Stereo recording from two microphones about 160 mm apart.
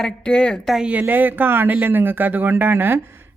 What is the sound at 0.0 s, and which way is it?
Speech, 5° left (ahead or behind).